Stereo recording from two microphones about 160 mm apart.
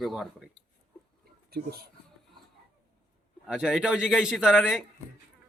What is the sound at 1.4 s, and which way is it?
Speech, 75° right (ahead or behind).